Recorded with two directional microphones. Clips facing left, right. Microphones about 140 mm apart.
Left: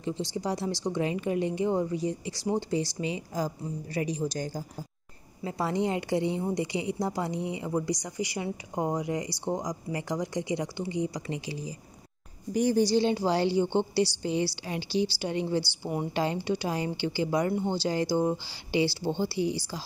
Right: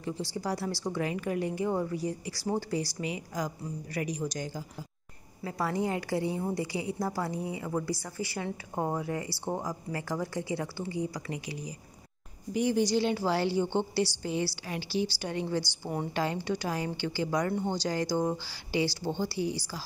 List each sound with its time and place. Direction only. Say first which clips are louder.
0.0 s a woman's voice: left 3 dB; 20° left (ahead or behind); by 4.6 s 35° left (ahead or behind)
5.4 s a woman's voice: left 2 dB; 25° left (ahead or behind)
12.5 s a woman's voice: left 3 dB; 40° left (ahead or behind); by 19.8 s 20° left (ahead or behind)